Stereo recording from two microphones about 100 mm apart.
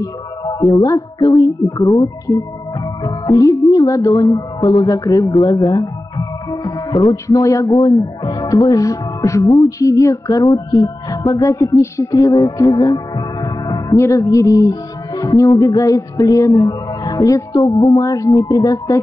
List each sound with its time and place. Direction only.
0.0 s speech: 40° left (ahead or behind)
5.3 s music: 45° left (ahead or behind)
7.2 s speech: 35° left (ahead or behind)
7.7 s speech: 45° left (ahead or behind)